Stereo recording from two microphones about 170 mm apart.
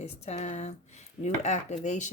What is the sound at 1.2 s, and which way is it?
Dishes, 45° left (ahead or behind).